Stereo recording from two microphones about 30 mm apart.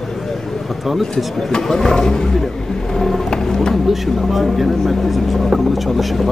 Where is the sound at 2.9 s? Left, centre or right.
Centre.